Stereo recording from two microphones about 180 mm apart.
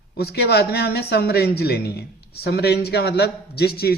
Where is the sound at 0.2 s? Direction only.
60° left (ahead or behind).